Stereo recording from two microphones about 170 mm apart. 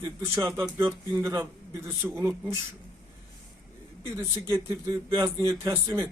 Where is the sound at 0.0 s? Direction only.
15° right (ahead or behind).